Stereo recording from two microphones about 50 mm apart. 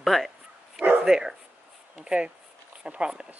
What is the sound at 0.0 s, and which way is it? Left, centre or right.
Speech, centre.